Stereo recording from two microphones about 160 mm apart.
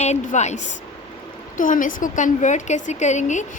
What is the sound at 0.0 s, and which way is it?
A woman's voice, 45° left (ahead or behind).